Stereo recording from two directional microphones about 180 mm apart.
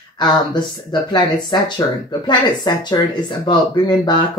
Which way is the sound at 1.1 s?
20° left (ahead or behind).